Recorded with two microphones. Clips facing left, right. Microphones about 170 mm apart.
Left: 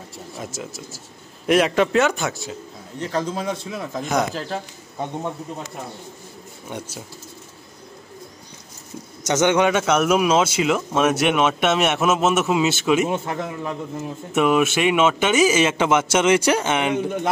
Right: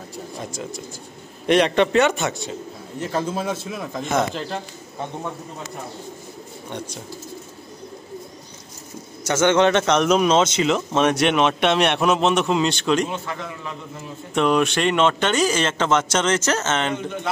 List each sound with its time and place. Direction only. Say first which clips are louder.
0.1 s a sound: right 1 dB; 5° left (ahead or behind)
1.5 s a man's voice: even; centre (ahead or behind)
9.2 s a man's voice: right 1 dB; 15° left (ahead or behind)
13.1 s a man's voice: left 4 dB; 45° left (ahead or behind)
14.3 s speech: left 1 dB; 5° left (ahead or behind)